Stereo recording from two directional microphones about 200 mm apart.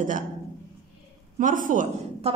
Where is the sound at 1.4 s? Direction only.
40° right (ahead or behind).